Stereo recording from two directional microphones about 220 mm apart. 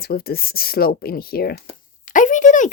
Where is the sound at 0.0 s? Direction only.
45° left (ahead or behind).